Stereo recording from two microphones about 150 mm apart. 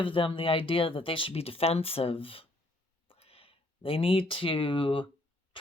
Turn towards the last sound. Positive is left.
turn(degrees=35)  # may be behind; listen again after turning